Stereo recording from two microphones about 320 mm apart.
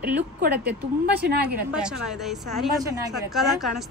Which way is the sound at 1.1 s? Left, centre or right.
Right.